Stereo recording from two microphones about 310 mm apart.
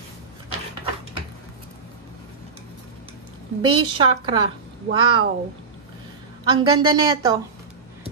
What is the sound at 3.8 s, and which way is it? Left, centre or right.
Speech, centre.